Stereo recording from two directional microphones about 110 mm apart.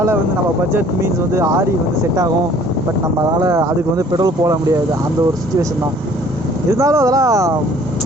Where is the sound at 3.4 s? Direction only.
25° right (ahead or behind).